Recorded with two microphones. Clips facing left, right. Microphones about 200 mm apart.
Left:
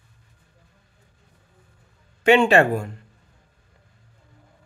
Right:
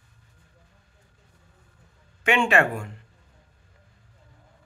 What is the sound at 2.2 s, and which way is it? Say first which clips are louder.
Speech: left 6 dB; 35° left (ahead or behind).